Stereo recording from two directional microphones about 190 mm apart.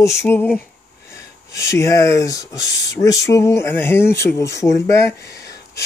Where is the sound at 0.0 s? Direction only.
15° left (ahead or behind).